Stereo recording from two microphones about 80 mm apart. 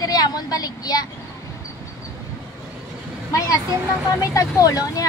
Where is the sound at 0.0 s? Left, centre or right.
Left.